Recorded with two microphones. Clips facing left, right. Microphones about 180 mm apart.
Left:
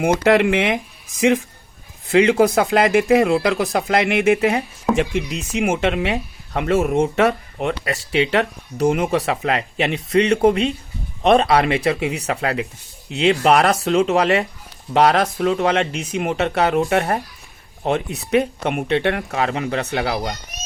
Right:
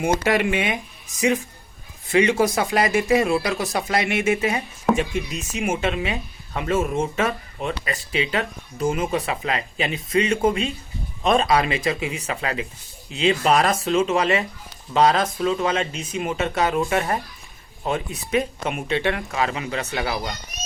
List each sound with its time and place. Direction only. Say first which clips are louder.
0.0 s speech: left 5 dB; 65° left (ahead or behind)
2.3 s speech: left 5 dB; 60° left (ahead or behind)
4.9 s speech: left 4 dB; 80° left; by 20.3 s 55° left (ahead or behind)